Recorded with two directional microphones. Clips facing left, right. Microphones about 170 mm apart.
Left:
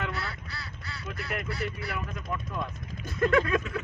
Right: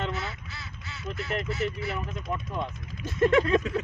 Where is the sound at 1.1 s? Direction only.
25° right (ahead or behind).